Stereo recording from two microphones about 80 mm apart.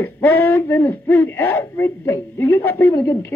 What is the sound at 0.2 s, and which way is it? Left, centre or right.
Speech, left.